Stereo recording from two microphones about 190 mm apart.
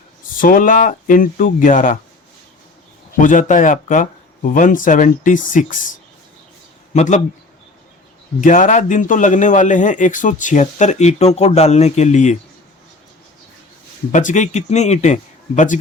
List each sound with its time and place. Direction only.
0.3 s speech: 45° left (ahead or behind)
3.2 s a man's voice: 45° left (ahead or behind)
8.4 s a man's voice: 40° left (ahead or behind)
14.1 s a man's voice: 40° left (ahead or behind)